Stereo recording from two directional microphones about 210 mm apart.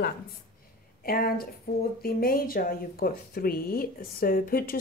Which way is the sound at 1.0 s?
45° left (ahead or behind).